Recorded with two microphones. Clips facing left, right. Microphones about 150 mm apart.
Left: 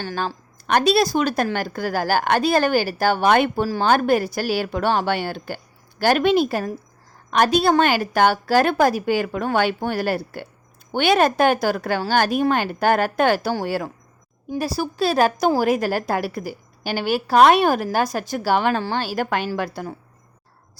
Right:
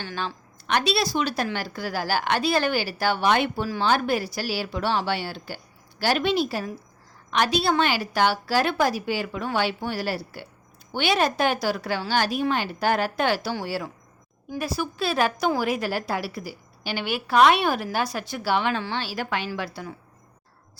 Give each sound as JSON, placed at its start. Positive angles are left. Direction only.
{"t": 0.0, "sound": "speech", "side_deg": 40}
{"t": 14.6, "sound": "speech", "side_deg": 35}